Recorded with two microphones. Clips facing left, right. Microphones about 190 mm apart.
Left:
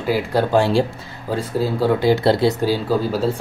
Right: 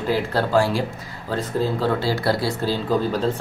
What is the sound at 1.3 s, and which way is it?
Speech, 10° left (ahead or behind).